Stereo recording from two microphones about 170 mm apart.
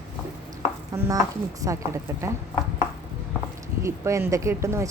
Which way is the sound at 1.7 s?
15° right (ahead or behind).